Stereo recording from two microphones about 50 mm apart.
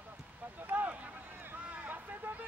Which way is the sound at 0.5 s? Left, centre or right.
Right.